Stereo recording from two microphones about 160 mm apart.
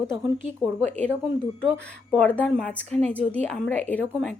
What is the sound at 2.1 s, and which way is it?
A woman's voice, 10° left (ahead or behind).